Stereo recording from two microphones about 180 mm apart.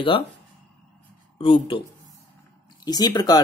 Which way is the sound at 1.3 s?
30° left (ahead or behind).